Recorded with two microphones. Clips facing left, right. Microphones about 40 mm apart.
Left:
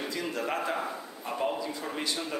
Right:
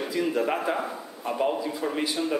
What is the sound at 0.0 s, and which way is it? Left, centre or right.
A man's voice, centre.